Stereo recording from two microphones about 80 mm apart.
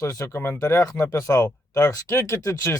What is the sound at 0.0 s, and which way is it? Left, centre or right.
Speech, left.